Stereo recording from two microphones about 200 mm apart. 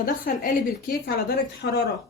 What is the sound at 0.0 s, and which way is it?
Speech, 45° left (ahead or behind).